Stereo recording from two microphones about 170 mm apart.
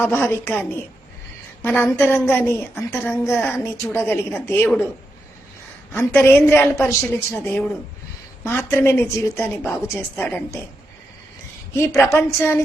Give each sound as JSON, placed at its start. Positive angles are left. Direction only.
{"t": 0.0, "sound": "a woman's voice", "side_deg": 10}
{"t": 5.9, "sound": "a woman's voice", "side_deg": 15}
{"t": 11.7, "sound": "a woman's voice", "side_deg": 15}